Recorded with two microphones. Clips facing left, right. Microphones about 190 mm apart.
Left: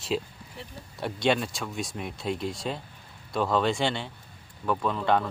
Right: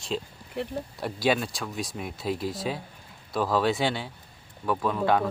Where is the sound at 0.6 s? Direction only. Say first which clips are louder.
Right 12 dB; 65° right (ahead or behind).